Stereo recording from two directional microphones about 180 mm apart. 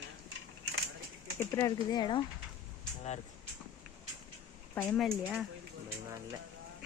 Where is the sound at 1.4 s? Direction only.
15° left (ahead or behind).